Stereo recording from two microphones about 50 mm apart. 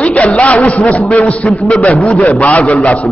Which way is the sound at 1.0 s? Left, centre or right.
Centre.